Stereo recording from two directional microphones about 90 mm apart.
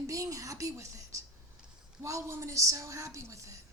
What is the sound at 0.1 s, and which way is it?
A woman's voice, 40° right (ahead or behind).